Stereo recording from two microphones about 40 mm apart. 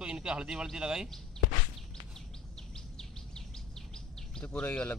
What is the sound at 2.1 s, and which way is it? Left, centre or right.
Bird vocalization, centre.